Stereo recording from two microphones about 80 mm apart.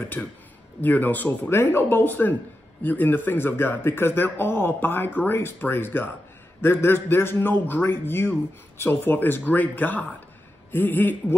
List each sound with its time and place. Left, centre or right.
0.2 s a man's voice: centre